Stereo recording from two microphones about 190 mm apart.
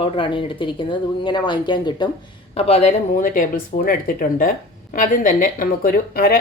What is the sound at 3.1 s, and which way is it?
Speech, 45° left (ahead or behind).